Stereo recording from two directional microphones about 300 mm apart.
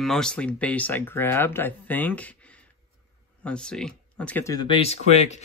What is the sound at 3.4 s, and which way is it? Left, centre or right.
Speech, centre.